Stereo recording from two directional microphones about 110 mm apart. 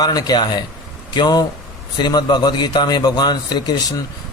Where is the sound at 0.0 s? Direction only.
35° left (ahead or behind).